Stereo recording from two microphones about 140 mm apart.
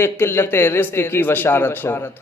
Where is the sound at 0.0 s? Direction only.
15° left (ahead or behind).